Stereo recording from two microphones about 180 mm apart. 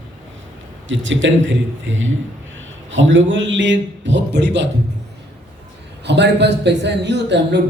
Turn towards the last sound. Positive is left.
turn(degrees=-70)  # may be behind; listen again after turning